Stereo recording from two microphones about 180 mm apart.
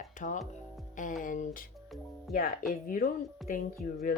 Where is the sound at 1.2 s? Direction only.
45° left (ahead or behind).